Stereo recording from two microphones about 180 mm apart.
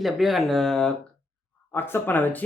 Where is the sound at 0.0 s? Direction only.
Centre (ahead or behind).